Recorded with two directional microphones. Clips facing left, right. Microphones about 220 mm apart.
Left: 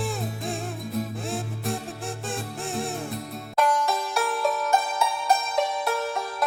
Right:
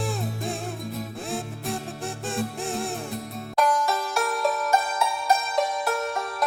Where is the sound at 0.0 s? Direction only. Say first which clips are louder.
Right 1 dB; centre (ahead or behind).